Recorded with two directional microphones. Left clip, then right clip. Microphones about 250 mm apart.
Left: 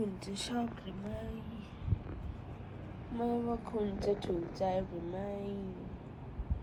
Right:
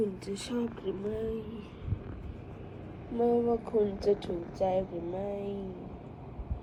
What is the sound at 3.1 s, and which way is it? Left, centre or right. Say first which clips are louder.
Speech: right 8 dB; left.